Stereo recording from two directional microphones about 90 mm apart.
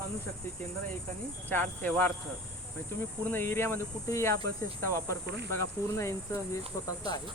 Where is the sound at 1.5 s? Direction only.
20° left (ahead or behind).